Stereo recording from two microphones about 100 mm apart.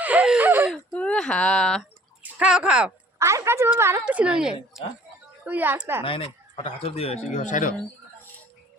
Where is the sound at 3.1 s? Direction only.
30° right (ahead or behind).